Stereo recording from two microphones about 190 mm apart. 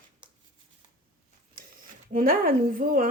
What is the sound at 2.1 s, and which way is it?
Speech, 45° right (ahead or behind).